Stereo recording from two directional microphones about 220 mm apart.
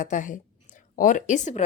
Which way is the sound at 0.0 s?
35° left (ahead or behind).